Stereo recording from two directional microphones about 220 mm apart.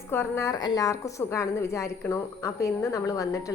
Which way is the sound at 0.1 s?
10° left (ahead or behind).